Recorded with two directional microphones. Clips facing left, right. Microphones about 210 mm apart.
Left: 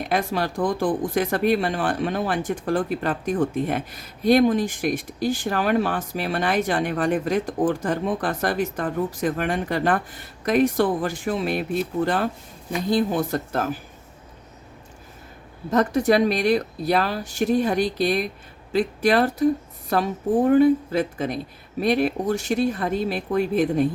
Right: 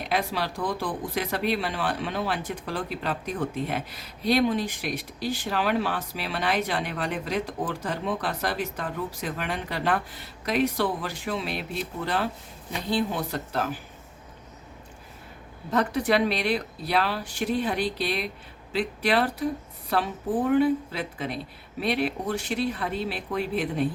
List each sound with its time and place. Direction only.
0.1 s speech: 50° left (ahead or behind)
15.7 s speech: 45° left (ahead or behind)